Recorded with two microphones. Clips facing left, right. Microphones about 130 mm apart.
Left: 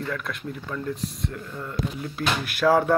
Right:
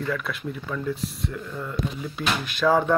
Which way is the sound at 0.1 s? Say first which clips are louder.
Right 2 dB; 5° right (ahead or behind).